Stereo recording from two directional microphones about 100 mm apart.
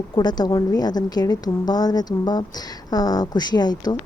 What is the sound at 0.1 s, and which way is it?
A woman's voice, 45° left (ahead or behind).